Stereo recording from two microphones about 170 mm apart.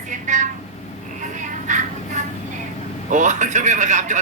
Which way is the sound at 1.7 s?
45° right (ahead or behind).